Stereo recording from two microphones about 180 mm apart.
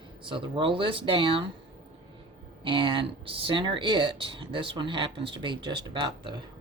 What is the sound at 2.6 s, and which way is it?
Speech, 25° right (ahead or behind).